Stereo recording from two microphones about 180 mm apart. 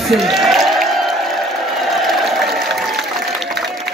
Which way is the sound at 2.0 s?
Centre (ahead or behind).